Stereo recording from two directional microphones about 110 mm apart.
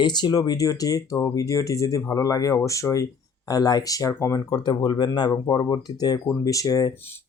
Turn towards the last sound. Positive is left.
turn(degrees=35)  # may be behind; listen again after turning